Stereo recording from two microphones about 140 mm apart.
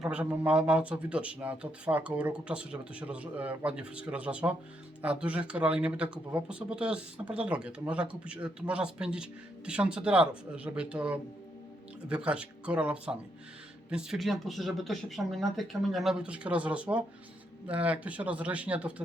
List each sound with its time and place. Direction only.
0.0 s speech: 10° right (ahead or behind)